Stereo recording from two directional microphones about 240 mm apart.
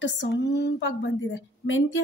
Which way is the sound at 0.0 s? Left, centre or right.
Left.